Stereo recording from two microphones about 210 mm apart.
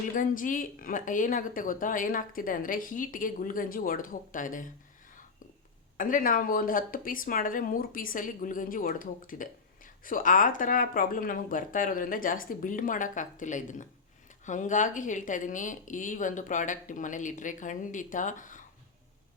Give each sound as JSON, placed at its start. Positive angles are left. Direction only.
{"t": 0.1, "sound": "speech", "side_deg": 40}
{"t": 6.0, "sound": "speech", "side_deg": 40}